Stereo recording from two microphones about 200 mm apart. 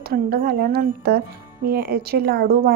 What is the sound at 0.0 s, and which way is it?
A woman's voice, 50° right (ahead or behind).